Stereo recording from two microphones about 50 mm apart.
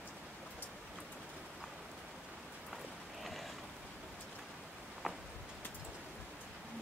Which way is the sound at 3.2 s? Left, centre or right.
Centre.